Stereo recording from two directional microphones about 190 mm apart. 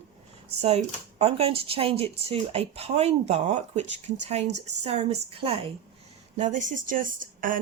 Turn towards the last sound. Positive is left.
turn(degrees=-45)  # may be behind; listen again after turning